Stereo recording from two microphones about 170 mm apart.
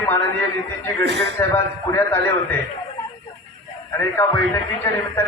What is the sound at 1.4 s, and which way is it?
Speech, 15° left (ahead or behind).